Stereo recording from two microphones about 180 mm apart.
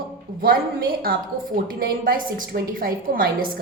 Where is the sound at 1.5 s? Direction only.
50° right (ahead or behind).